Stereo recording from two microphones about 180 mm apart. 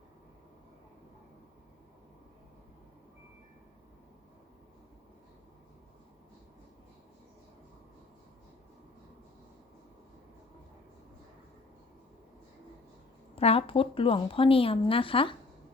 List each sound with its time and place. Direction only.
13.3 s speech: 35° left (ahead or behind)